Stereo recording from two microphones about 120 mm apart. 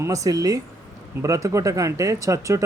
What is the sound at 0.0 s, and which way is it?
Speech, 30° right (ahead or behind).